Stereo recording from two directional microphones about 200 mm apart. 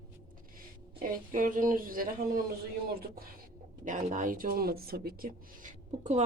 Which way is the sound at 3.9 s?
40° right (ahead or behind).